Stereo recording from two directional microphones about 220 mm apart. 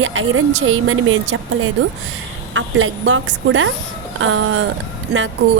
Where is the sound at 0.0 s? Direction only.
65° right (ahead or behind).